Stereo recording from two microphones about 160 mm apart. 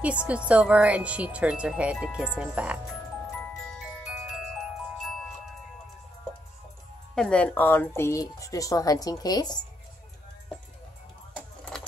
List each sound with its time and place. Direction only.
0.0 s speech: 10° right (ahead or behind)
7.2 s speech: 5° left (ahead or behind); by 9.7 s 25° left (ahead or behind)
11.3 s a sound: 5° left (ahead or behind)